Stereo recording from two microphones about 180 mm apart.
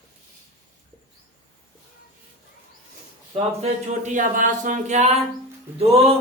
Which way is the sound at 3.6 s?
40° right (ahead or behind).